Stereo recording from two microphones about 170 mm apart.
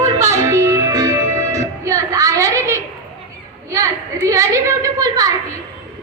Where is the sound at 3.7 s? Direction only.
20° right (ahead or behind).